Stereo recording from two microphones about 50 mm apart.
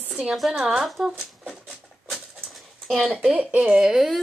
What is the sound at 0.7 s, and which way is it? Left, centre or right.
Speech, centre.